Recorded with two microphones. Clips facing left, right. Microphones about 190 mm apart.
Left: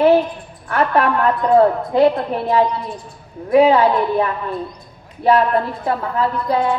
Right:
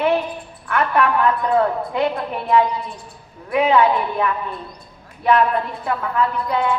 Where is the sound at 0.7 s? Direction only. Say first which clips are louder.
Left 2 dB; 35° left (ahead or behind).